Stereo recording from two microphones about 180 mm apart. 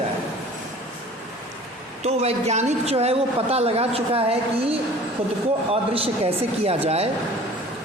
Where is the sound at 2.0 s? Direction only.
35° right (ahead or behind).